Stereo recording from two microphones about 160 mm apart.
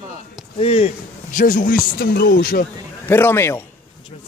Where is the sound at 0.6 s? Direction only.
35° left (ahead or behind).